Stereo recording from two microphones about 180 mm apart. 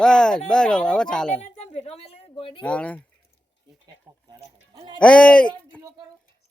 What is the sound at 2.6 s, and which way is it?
Speech, 5° left (ahead or behind).